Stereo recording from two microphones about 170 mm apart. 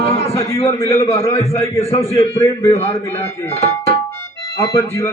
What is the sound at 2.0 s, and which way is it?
Speech, 20° left (ahead or behind).